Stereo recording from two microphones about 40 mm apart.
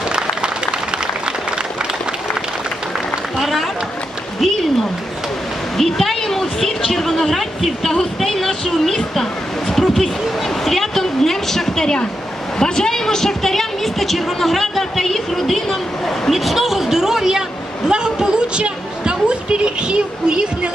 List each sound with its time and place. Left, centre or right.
0.1 s a sound: right
3.3 s run: centre
5.7 s a woman's voice: centre; by 20.7 s right